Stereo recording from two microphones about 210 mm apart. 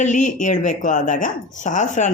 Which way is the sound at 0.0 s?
35° left (ahead or behind).